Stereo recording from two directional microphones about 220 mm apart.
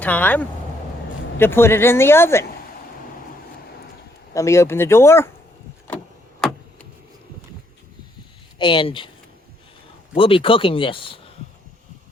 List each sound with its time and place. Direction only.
0.0 s speech: 5° left (ahead or behind)
4.4 s speech: 15° left (ahead or behind)
8.5 s speech: 20° left (ahead or behind)
10.2 s speech: 25° left (ahead or behind)